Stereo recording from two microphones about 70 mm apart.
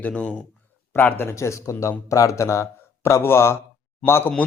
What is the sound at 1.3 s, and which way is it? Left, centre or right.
A man's voice, left.